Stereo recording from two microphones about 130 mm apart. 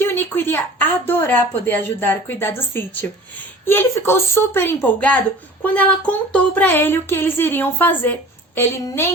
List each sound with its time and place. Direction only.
0.0 s a woman's voice: 15° left (ahead or behind)
6.3 s a woman's voice: 10° left (ahead or behind)